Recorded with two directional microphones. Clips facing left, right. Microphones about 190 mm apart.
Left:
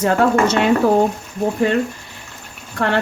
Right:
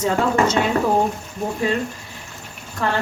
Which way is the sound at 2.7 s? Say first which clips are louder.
Left 4 dB; 65° left (ahead or behind).